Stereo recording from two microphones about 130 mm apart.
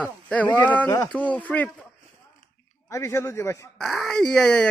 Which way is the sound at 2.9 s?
25° left (ahead or behind).